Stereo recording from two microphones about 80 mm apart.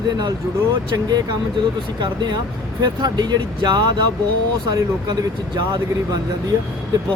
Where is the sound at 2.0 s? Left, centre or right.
Right.